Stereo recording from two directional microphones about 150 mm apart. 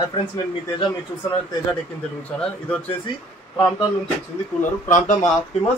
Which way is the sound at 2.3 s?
5° left (ahead or behind).